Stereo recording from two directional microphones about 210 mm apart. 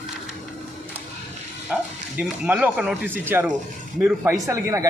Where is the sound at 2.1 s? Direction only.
5° right (ahead or behind).